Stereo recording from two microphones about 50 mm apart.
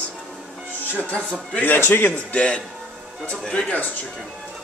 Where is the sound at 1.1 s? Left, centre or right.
Left.